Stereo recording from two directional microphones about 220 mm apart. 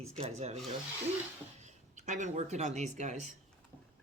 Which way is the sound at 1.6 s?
35° right (ahead or behind).